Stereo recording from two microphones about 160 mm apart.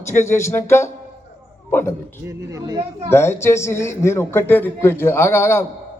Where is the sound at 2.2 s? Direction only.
20° right (ahead or behind).